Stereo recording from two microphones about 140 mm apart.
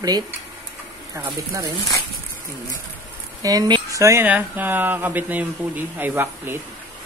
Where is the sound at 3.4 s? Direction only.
30° right (ahead or behind).